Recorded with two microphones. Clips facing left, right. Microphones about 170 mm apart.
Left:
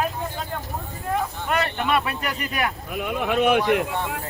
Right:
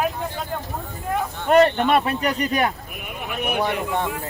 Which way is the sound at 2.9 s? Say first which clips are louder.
Left 8 dB; 90° left.